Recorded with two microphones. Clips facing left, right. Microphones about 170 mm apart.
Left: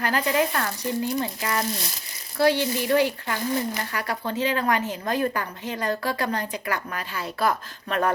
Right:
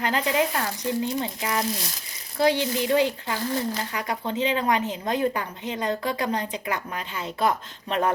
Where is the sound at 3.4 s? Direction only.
15° left (ahead or behind).